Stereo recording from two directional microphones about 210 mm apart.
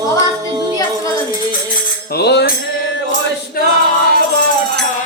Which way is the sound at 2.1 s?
50° left (ahead or behind).